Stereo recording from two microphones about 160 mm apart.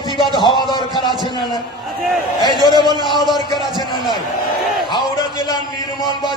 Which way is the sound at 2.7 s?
25° right (ahead or behind).